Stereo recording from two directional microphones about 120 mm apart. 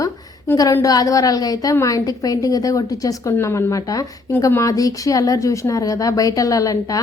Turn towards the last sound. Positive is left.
turn(degrees=30)  # may be behind; listen again after turning